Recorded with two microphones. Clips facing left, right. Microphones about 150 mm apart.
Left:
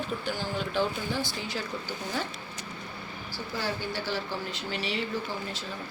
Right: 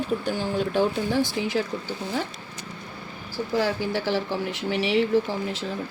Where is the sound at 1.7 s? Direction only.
15° right (ahead or behind).